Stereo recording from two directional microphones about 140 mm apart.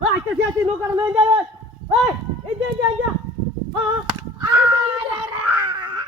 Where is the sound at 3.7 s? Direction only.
30° right (ahead or behind).